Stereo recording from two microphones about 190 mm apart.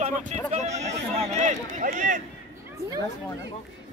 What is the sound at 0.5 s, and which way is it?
Speech, 35° right (ahead or behind).